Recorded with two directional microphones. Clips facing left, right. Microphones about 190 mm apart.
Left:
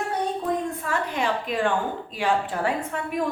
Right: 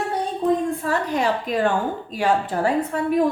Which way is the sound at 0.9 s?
40° right (ahead or behind).